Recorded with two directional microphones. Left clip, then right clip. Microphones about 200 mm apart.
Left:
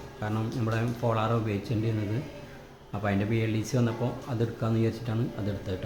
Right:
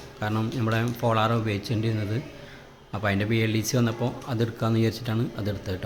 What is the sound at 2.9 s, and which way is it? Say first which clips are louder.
Speech: right 4 dB; 20° right (ahead or behind).